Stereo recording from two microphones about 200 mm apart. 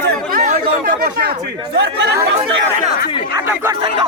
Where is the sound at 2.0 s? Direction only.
65° right (ahead or behind).